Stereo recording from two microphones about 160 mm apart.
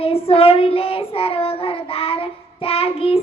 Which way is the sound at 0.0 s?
35° left (ahead or behind).